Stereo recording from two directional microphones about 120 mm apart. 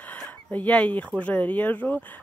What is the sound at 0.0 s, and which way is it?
Speech, 15° left (ahead or behind).